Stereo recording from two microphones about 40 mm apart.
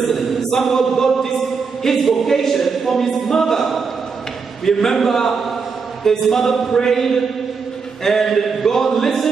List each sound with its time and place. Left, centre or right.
0.0 s chant: centre
1.8 s speech: centre
4.6 s a sound: centre